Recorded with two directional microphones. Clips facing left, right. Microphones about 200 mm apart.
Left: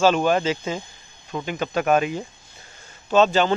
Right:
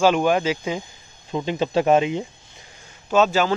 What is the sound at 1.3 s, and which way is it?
Speech, 25° right (ahead or behind).